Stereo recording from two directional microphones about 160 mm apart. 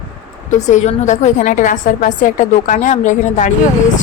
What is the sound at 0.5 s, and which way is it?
A woman's voice, 50° left (ahead or behind).